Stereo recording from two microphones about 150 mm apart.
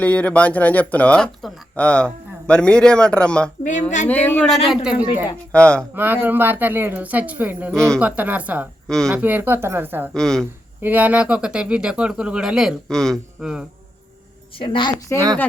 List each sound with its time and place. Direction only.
0.0 s speech: 10° left (ahead or behind)
3.6 s speech: 55° left (ahead or behind)
4.1 s speech: 10° left (ahead or behind); by 5.2 s 10° right (ahead or behind)
5.5 s speech: 5° left (ahead or behind)
5.9 s a woman's voice: 15° right (ahead or behind)
7.7 s speech: 5° left (ahead or behind)
7.9 s a woman's voice: 10° right (ahead or behind)
10.2 s speech: 5° left (ahead or behind)
10.8 s speech: 10° right (ahead or behind)
14.5 s a woman's voice: 35° left (ahead or behind)